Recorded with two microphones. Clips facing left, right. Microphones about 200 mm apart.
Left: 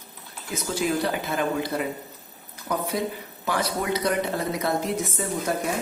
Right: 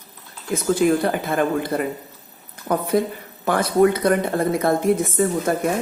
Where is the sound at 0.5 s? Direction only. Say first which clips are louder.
Right 8 dB; 50° right (ahead or behind).